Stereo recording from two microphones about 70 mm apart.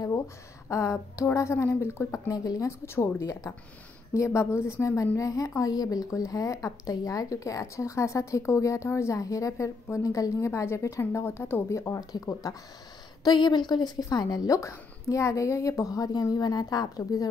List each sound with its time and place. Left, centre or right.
0.7 s speech: left
2.2 s a woman's voice: left
2.8 s speech: left
11.1 s speech: left
12.1 s a woman's voice: left
13.2 s a woman's voice: left
14.6 s a woman's voice: left